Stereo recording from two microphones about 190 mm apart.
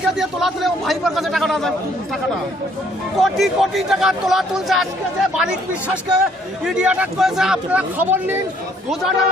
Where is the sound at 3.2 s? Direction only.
Centre (ahead or behind).